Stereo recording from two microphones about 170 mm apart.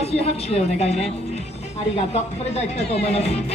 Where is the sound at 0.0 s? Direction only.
35° left (ahead or behind).